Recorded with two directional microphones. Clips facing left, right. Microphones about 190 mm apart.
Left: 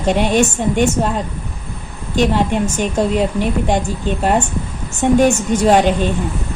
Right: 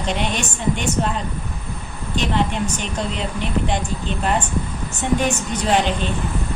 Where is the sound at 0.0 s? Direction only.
45° left (ahead or behind).